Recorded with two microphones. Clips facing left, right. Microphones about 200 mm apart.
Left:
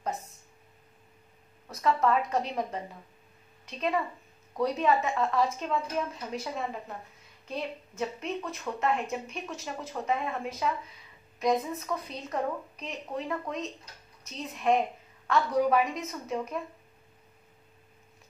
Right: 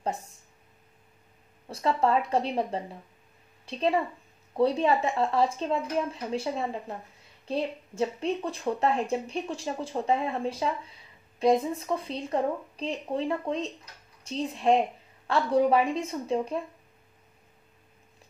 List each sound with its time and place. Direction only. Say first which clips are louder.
1.7 s a woman's voice: right 1 dB; 30° right (ahead or behind)